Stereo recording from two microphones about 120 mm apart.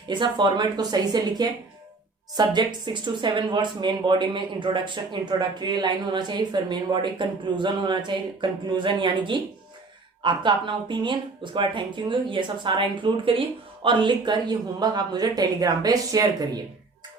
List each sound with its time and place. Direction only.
0.1 s speech: 40° right (ahead or behind)